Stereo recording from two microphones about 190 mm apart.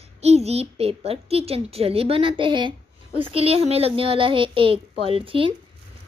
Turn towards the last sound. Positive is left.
turn(degrees=-30)  # may be behind; listen again after turning